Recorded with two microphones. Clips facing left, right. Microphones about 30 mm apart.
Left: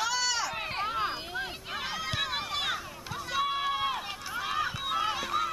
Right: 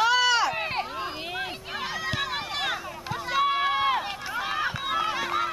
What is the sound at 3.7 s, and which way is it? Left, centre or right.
Run, right.